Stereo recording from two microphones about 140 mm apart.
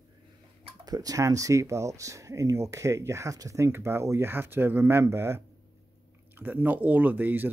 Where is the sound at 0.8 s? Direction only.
25° right (ahead or behind).